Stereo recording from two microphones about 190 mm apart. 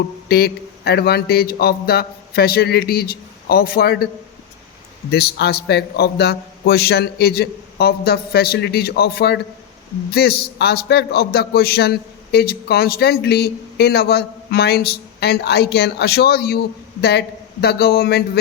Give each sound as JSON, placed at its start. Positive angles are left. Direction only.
{"t": 0.3, "sound": "a man's voice", "side_deg": 55}
{"t": 5.1, "sound": "a man's voice", "side_deg": 60}